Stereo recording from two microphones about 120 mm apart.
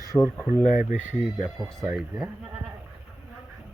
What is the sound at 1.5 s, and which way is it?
Speech, 30° right (ahead or behind).